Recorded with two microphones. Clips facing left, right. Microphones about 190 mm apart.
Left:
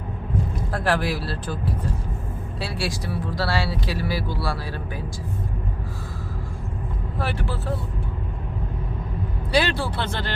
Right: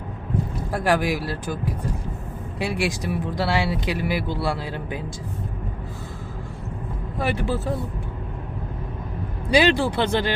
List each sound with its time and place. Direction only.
0.7 s speech: 10° right (ahead or behind)
7.2 s speech: 15° right (ahead or behind)
9.5 s speech: 15° right (ahead or behind)